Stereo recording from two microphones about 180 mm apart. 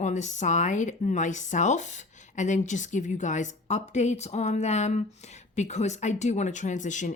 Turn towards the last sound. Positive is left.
turn(degrees=45)  # may be behind; listen again after turning